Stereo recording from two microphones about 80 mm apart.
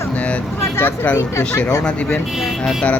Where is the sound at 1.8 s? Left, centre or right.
Centre.